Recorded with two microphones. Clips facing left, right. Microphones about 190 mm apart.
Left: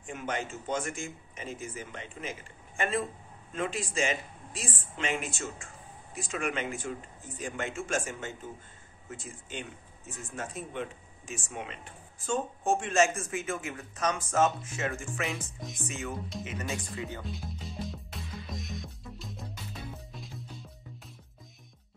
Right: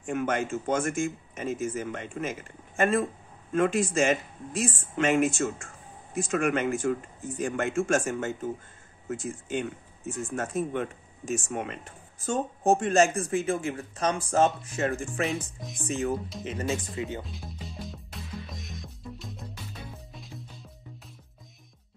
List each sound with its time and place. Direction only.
0.0 s speech: 50° right (ahead or behind); by 17.2 s 25° right (ahead or behind)
17.2 s music: centre (ahead or behind)